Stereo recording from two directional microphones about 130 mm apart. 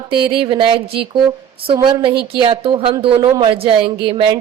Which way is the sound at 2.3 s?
40° right (ahead or behind).